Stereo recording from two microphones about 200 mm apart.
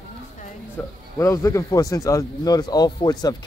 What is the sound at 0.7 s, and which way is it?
Speech, 15° left (ahead or behind).